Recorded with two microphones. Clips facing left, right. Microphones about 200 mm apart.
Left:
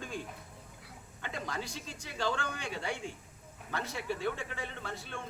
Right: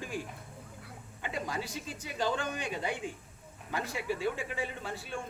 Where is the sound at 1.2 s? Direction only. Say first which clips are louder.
Right 3 dB; 10° right (ahead or behind).